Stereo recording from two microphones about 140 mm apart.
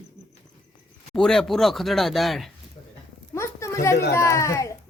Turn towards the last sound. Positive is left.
turn(degrees=20)  # may be behind; listen again after turning